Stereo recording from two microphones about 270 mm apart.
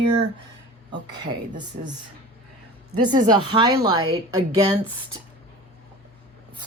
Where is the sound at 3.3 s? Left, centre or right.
Centre.